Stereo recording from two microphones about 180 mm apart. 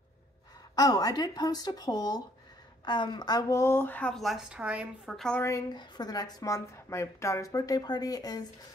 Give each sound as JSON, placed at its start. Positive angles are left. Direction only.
{"t": 0.7, "sound": "speech", "side_deg": 20}
{"t": 5.4, "sound": "speech", "side_deg": 20}